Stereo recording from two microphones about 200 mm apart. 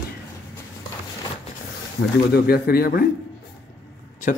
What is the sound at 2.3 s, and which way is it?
Speech, 50° left (ahead or behind).